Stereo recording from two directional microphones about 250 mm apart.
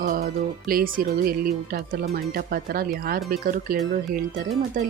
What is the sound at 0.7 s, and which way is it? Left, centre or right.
Speech, right.